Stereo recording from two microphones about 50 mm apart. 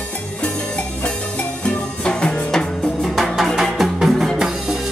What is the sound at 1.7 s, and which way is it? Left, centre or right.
Music, centre.